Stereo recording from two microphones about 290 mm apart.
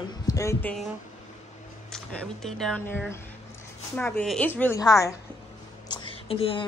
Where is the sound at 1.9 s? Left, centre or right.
Centre.